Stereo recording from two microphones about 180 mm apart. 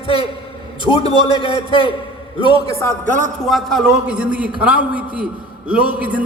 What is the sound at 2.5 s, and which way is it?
Speech, 30° right (ahead or behind).